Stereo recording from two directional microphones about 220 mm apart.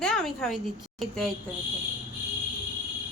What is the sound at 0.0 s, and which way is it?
A woman's voice, centre (ahead or behind).